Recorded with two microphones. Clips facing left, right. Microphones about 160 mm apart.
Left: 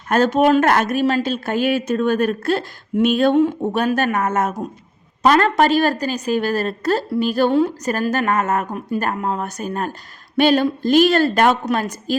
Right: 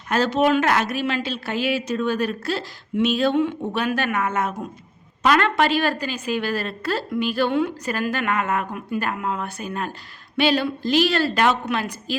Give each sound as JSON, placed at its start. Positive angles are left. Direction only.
{"t": 0.1, "sound": "a woman's voice", "side_deg": 50}